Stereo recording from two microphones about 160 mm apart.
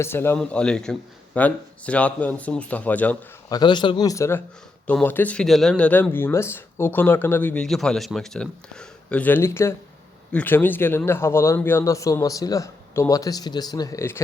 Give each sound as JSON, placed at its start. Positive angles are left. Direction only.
{"t": 0.0, "sound": "speech", "side_deg": 15}
{"t": 3.5, "sound": "speech", "side_deg": 30}